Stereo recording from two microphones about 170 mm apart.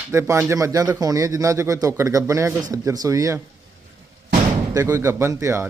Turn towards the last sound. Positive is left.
turn(degrees=-15)  # may be behind; listen again after turning